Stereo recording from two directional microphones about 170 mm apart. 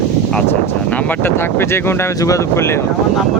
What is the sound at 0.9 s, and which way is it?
Speech, 10° left (ahead or behind).